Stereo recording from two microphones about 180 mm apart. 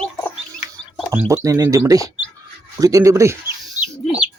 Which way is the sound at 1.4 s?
15° right (ahead or behind).